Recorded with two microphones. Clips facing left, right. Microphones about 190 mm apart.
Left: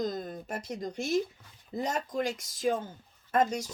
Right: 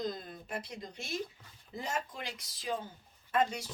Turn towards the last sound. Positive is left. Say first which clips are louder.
# left 4 dB
turn(degrees=45)  # may be behind; listen again after turning